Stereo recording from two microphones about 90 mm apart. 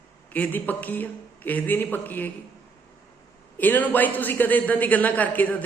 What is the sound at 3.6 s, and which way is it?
Speech, 20° left (ahead or behind).